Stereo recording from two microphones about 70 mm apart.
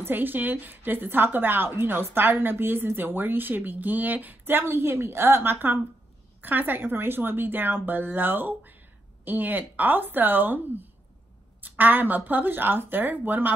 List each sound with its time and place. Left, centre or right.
0.0 s a woman's voice: right
11.6 s a woman's voice: right